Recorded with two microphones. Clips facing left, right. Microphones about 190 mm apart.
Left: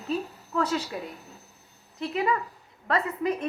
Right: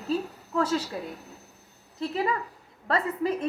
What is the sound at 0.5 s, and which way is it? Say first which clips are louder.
Speech: right 1 dB; 25° right (ahead or behind).